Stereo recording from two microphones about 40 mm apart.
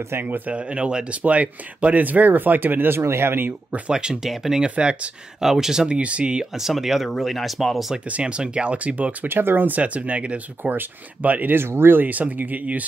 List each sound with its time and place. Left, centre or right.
0.5 s speech: right
3.9 s speech: centre
4.6 s speech: right
5.4 s speech: centre
5.9 s speech: right
6.5 s speech: centre
8.2 s speech: right
8.7 s speech: right
9.3 s speech: right
9.7 s speech: right
10.6 s speech: right
11.5 s speech: right